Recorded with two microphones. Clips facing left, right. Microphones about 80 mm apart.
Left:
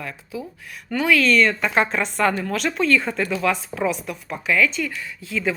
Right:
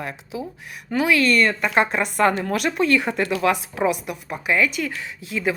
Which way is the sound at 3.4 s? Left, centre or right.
Right.